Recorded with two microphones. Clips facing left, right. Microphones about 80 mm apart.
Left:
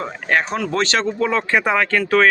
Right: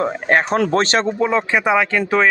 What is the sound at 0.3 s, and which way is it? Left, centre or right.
Speech, right.